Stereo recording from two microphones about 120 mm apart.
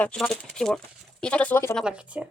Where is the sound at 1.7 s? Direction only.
5° right (ahead or behind).